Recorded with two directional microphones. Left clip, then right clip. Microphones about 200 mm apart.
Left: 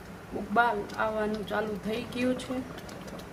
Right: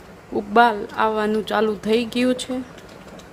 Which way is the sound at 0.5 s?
60° right (ahead or behind).